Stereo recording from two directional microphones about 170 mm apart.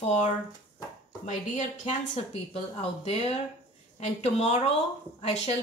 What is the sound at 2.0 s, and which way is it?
A woman's voice, 40° left (ahead or behind).